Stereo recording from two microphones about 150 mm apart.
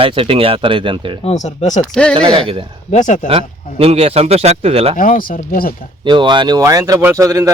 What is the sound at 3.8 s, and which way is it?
A man's voice, 40° right (ahead or behind).